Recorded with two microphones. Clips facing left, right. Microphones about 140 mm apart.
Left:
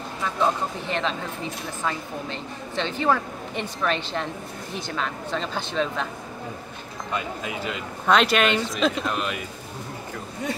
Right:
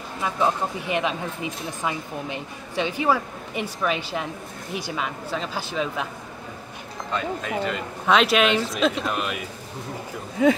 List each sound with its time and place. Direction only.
0.2 s speech: 10° right (ahead or behind)
7.1 s speech: 10° left (ahead or behind)
10.4 s speech: 90° right